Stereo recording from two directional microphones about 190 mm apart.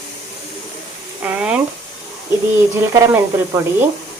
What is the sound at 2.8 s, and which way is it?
Speech, 15° right (ahead or behind).